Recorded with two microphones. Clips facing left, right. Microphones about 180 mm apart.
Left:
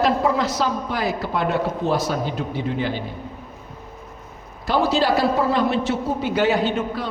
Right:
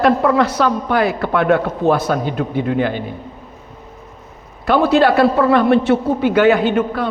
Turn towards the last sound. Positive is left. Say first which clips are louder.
# right 5 dB
turn(degrees=-60)  # may be behind; listen again after turning